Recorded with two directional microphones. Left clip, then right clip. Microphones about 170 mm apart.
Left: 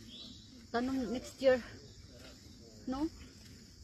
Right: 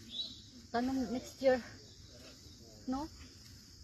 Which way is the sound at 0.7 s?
35° left (ahead or behind).